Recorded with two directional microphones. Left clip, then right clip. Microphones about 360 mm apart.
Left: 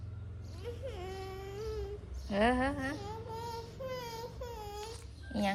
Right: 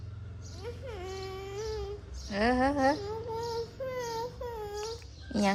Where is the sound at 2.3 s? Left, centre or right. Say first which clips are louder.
Right 3 dB; centre.